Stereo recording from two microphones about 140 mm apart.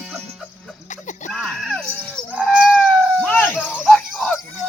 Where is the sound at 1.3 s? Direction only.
5° left (ahead or behind).